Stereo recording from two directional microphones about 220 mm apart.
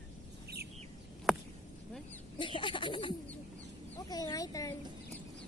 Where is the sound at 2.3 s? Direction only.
20° left (ahead or behind).